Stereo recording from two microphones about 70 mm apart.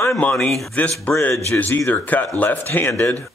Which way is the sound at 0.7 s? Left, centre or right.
Left.